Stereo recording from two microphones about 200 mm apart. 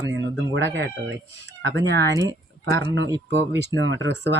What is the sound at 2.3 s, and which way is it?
Speech, 20° left (ahead or behind).